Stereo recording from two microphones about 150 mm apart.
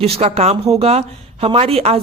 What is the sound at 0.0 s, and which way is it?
Speech, 40° right (ahead or behind).